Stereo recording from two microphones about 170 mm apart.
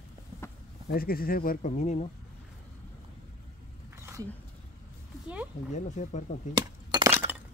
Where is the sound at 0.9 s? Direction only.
60° left (ahead or behind); by 2.1 s 45° left (ahead or behind).